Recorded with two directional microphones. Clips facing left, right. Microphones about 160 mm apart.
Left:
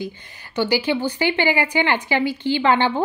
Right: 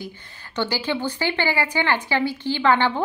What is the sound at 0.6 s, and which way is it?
A woman's voice, 10° left (ahead or behind).